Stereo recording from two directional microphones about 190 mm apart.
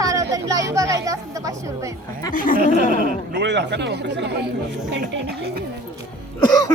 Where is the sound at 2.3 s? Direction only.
45° left (ahead or behind).